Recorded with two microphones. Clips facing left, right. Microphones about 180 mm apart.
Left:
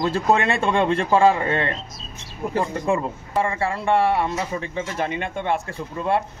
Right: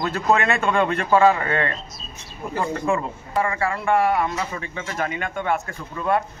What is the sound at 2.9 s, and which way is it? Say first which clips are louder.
A man's voice: left 1 dB; 30° left (ahead or behind).